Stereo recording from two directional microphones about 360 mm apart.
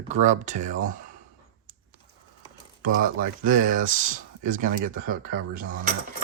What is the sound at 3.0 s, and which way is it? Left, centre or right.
Speech, right.